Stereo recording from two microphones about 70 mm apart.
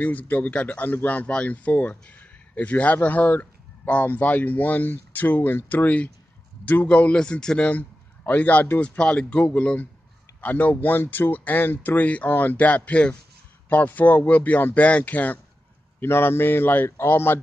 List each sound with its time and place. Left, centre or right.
0.0 s a man's voice: left